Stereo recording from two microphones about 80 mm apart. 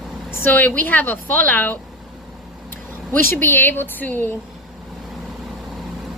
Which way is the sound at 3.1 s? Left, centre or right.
Left.